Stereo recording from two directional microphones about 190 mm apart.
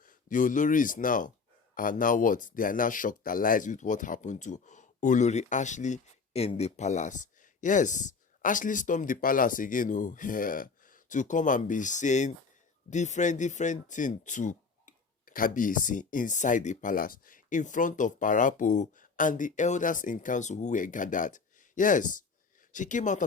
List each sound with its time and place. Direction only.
0.0 s speech: 45° left (ahead or behind)